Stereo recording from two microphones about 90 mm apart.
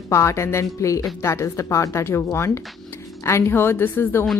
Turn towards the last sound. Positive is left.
turn(degrees=25)  # may be behind; listen again after turning